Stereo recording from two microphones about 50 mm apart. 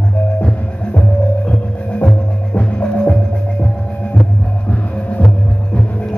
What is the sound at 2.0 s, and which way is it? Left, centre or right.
Music, left.